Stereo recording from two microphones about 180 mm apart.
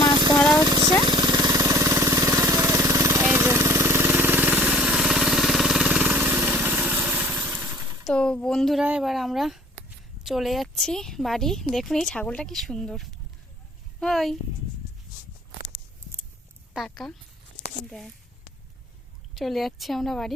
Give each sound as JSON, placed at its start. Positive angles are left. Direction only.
{"t": 0.1, "sound": "a sound", "side_deg": -25}
{"t": 1.0, "sound": "vehicle", "side_deg": -25}
{"t": 8.0, "sound": "a woman's voice", "side_deg": 5}
{"t": 16.7, "sound": "a woman's voice", "side_deg": 0}
{"t": 19.4, "sound": "a woman's voice", "side_deg": 0}